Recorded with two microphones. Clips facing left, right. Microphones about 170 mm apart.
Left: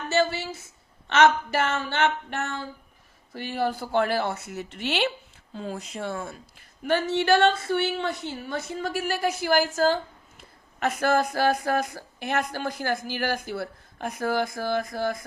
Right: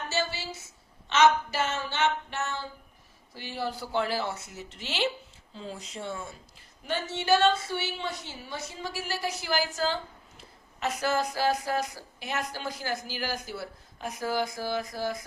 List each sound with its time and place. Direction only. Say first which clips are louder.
0.1 s a woman's voice: left 9 dB; 55° left (ahead or behind)